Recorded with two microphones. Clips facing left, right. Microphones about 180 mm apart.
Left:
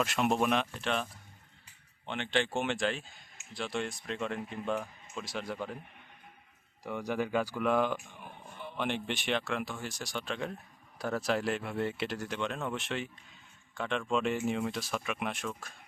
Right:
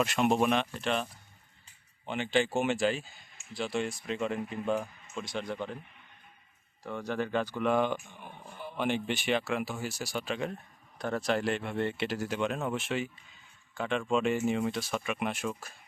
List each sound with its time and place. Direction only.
0.0 s speech: centre (ahead or behind)
2.0 s speech: 5° right (ahead or behind)
6.8 s speech: 15° left (ahead or behind); by 15.7 s 5° right (ahead or behind)